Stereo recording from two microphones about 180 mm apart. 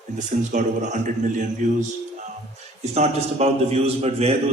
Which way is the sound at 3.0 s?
35° right (ahead or behind).